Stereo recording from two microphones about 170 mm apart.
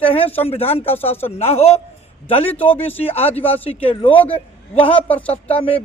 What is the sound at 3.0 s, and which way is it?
A man's voice, 35° left (ahead or behind).